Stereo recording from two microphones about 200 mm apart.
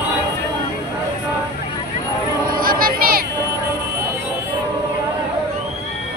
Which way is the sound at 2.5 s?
45° right (ahead or behind).